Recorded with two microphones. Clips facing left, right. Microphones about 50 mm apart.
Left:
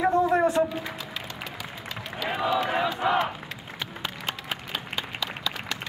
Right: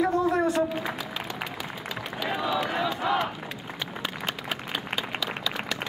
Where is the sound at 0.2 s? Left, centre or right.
Centre.